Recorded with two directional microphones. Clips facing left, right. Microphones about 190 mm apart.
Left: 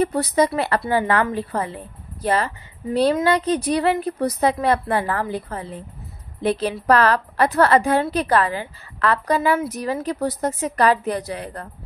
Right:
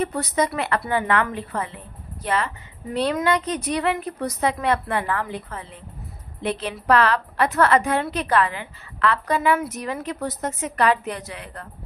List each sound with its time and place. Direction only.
0.0 s a woman's voice: 35° left (ahead or behind)